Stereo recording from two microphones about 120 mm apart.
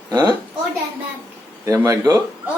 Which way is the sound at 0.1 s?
35° right (ahead or behind).